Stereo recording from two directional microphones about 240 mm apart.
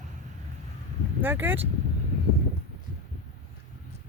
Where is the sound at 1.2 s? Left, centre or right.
Centre.